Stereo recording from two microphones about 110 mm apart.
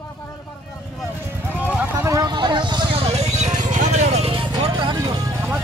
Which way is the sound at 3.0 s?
75° right (ahead or behind).